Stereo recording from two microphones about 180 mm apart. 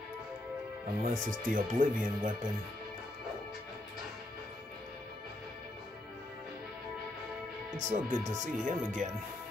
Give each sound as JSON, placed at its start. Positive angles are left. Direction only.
{"t": 1.0, "sound": "speech", "side_deg": -50}
{"t": 7.7, "sound": "speech", "side_deg": -45}